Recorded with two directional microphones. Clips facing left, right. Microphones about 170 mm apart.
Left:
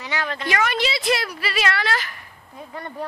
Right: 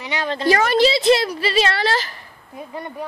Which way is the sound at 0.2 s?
30° right (ahead or behind).